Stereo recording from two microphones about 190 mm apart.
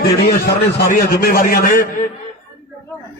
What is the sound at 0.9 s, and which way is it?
A man's voice, 55° left (ahead or behind).